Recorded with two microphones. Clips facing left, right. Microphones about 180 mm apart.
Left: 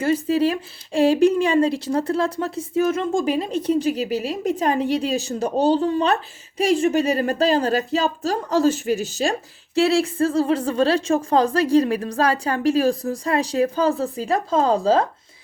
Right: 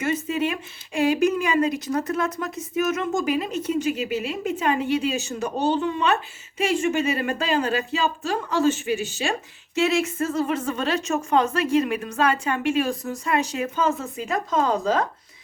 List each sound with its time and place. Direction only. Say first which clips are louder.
0.0 s speech: left 5 dB; 35° left (ahead or behind)